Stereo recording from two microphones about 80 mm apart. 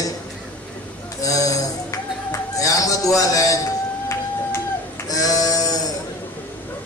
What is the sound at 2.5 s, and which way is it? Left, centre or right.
Music, left.